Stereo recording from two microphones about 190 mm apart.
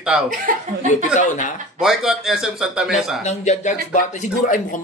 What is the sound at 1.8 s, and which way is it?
A man's voice, centre (ahead or behind).